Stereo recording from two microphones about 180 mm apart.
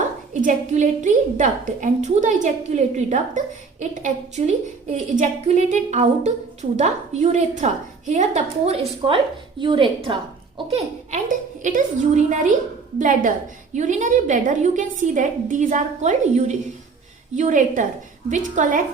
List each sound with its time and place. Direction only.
0.4 s a woman's voice: 45° right (ahead or behind)
10.7 s a woman's voice: 45° right (ahead or behind)